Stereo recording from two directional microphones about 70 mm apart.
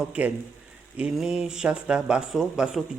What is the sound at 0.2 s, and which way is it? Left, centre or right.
Speech, right.